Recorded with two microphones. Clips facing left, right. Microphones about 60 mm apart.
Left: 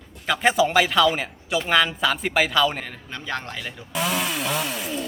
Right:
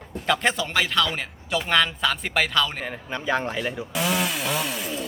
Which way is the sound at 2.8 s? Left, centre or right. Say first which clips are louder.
Right 5 dB; centre.